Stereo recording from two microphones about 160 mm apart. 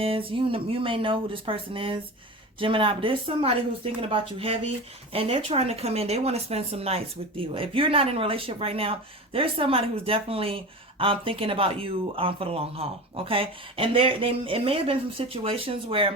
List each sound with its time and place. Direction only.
0.0 s speech: 35° right (ahead or behind)